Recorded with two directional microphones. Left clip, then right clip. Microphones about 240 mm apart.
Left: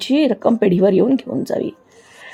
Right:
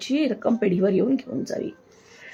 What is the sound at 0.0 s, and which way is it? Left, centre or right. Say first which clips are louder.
Speech: left 8 dB; centre.